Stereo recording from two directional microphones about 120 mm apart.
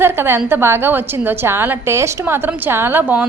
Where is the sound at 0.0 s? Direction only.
20° right (ahead or behind).